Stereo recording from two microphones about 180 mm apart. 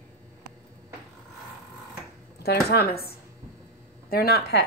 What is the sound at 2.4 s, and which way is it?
A woman's voice, 60° left (ahead or behind).